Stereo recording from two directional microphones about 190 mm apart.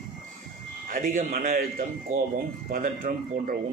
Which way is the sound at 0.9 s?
45° right (ahead or behind).